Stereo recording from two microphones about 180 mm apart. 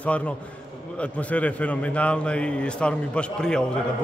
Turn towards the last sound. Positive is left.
turn(degrees=5)  # may be behind; listen again after turning